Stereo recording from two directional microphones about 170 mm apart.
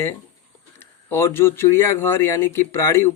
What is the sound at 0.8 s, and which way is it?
Speech, 15° left (ahead or behind).